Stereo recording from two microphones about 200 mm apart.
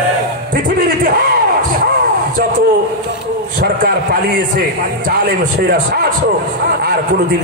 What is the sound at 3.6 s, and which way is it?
Speech, 45° right (ahead or behind).